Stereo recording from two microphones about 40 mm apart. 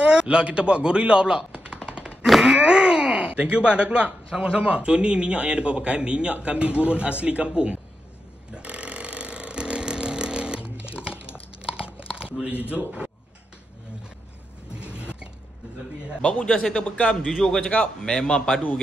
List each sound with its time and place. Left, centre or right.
0.0 s chopping: right
2.4 s speech: centre
8.5 s burping: right
11.7 s chewing: right
12.4 s a man's voice: right
14.8 s a sound: right
16.2 s a man's voice: left